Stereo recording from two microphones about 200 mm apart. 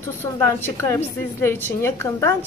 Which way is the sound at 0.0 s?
10° left (ahead or behind).